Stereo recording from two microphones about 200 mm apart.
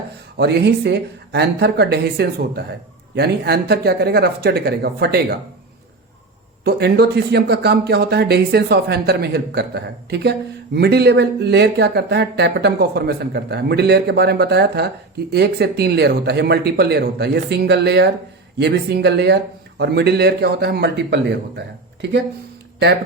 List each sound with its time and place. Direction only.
0.3 s speech: 55° right (ahead or behind)
6.7 s speech: 55° right (ahead or behind)